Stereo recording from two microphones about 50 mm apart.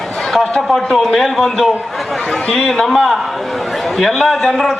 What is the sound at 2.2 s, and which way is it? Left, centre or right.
Speech, centre.